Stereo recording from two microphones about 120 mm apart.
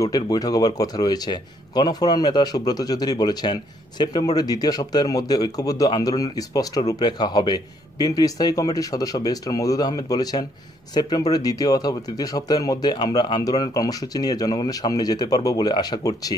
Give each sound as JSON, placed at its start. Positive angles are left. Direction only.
{"t": 0.0, "sound": "speech", "side_deg": 30}